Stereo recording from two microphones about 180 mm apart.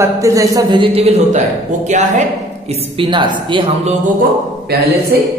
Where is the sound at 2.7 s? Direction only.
30° right (ahead or behind).